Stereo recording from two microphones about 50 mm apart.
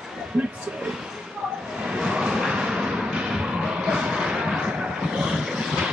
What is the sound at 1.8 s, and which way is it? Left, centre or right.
Music, centre.